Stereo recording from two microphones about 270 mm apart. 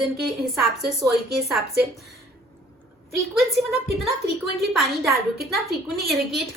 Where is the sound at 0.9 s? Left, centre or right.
Centre.